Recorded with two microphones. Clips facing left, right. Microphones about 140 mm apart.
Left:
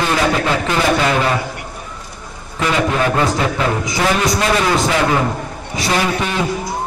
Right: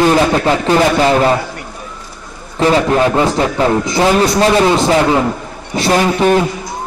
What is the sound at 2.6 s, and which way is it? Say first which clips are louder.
A man's voice: right 5 dB; 35° right (ahead or behind).